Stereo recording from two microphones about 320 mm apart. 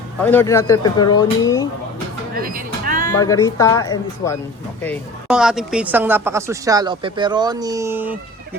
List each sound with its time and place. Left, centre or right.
0.2 s speech: centre
2.3 s music: right
3.2 s speech: centre